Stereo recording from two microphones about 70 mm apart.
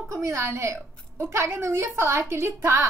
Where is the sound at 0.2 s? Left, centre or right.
Right.